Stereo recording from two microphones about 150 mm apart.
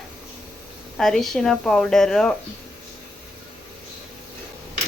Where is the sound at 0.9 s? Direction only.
5° left (ahead or behind).